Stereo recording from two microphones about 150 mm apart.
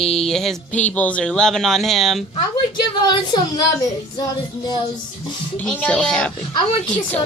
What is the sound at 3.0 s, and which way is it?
Speech, 30° left (ahead or behind).